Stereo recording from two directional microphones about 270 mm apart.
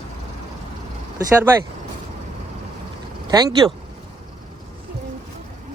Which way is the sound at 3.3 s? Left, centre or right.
Centre.